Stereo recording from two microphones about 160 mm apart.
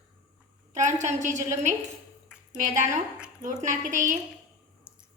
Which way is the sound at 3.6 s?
50° right (ahead or behind).